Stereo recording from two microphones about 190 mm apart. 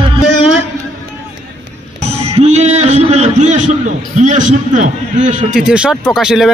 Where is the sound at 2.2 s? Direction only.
35° right (ahead or behind).